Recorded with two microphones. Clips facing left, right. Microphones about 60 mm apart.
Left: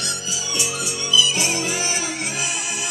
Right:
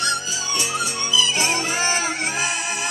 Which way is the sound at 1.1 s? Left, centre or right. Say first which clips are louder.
Left 1 dB; right.